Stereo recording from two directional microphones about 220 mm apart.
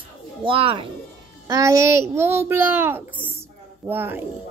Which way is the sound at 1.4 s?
15° right (ahead or behind).